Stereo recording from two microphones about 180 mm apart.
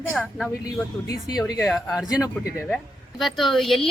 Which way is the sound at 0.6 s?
20° left (ahead or behind).